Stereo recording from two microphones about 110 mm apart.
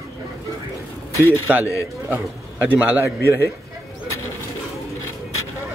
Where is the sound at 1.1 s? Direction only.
20° left (ahead or behind).